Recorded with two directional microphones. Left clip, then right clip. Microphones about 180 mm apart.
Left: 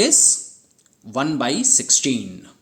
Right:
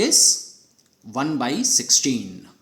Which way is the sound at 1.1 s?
25° left (ahead or behind).